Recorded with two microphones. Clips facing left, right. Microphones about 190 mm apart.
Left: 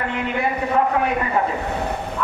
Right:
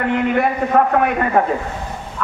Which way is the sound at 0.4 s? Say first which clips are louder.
Right 1 dB; 55° right (ahead or behind).